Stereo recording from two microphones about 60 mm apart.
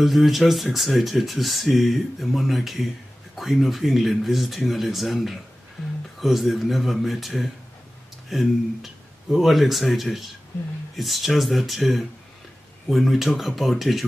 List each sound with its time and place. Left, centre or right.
0.0 s speech: centre